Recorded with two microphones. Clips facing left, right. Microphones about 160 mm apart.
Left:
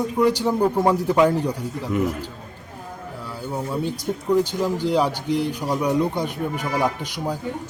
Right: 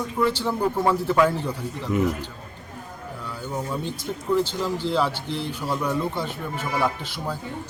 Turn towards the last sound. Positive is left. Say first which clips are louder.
# left 2 dB
turn(degrees=15)  # may be behind; listen again after turning